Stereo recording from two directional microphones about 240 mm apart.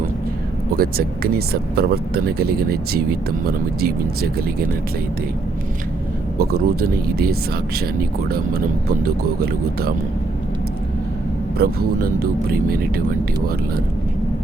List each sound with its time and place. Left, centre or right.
0.8 s speech: right
6.4 s speech: right
9.0 s speech: right
11.5 s speech: right